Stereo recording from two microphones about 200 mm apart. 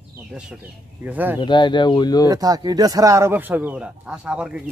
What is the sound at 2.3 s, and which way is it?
Speech, 20° right (ahead or behind).